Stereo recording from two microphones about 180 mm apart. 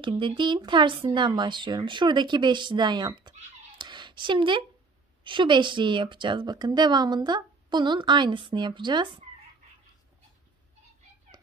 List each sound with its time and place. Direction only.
0.0 s a woman's voice: 25° right (ahead or behind)